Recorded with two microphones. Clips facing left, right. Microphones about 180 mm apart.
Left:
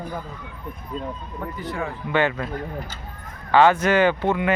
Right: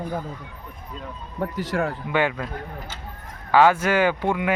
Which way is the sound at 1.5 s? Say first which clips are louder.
Right 4 dB; 90° right.